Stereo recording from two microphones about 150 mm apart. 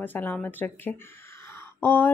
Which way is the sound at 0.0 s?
15° left (ahead or behind).